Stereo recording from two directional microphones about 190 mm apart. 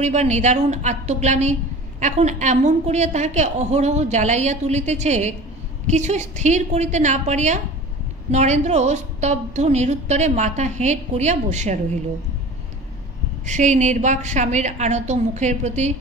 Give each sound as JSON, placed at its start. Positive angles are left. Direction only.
{"t": 0.0, "sound": "a woman's voice", "side_deg": -35}
{"t": 13.5, "sound": "a woman's voice", "side_deg": -40}